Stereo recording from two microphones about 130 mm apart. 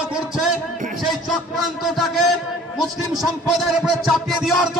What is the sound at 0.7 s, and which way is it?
Music, 90° right.